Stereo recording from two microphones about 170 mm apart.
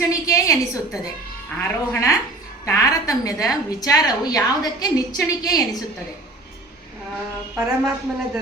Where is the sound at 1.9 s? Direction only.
15° left (ahead or behind).